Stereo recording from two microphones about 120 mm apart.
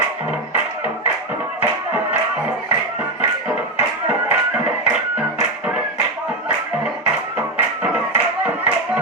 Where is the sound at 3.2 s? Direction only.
15° right (ahead or behind).